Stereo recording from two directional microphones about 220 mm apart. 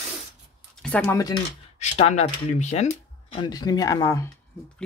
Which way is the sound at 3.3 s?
20° left (ahead or behind).